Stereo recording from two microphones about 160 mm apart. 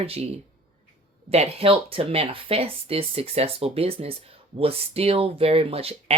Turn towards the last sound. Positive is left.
turn(degrees=-35)  # may be behind; listen again after turning